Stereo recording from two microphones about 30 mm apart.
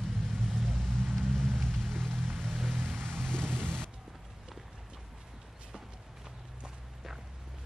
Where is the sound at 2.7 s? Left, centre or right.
Right.